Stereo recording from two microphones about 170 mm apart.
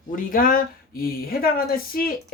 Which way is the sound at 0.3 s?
55° left (ahead or behind).